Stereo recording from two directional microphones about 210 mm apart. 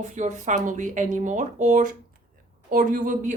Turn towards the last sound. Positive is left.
turn(degrees=-35)  # may be behind; listen again after turning